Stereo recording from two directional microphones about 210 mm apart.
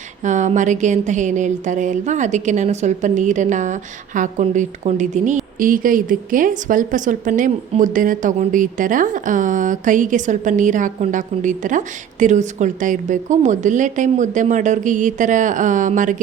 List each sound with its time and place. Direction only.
0.3 s a woman's voice: 35° right (ahead or behind)